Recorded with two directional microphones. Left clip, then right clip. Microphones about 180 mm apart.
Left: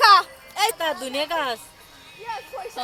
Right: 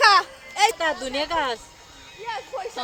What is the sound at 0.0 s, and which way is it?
Music, 15° left (ahead or behind).